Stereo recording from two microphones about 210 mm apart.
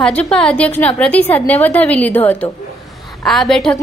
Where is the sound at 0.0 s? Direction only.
5° left (ahead or behind).